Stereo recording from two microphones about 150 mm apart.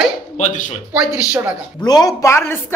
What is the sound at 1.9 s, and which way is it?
Speech, 25° left (ahead or behind).